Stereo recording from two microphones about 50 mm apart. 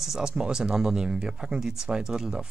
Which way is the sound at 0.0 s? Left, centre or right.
Centre.